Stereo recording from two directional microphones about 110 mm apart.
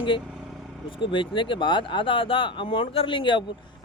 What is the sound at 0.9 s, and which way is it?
Speech, 50° left (ahead or behind).